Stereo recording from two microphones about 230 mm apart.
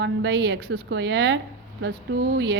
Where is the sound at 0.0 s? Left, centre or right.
Right.